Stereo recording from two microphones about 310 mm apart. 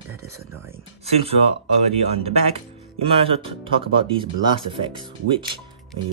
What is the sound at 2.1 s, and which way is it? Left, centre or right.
Speech, centre.